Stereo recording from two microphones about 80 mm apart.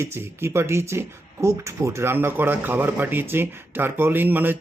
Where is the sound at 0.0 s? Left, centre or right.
Right.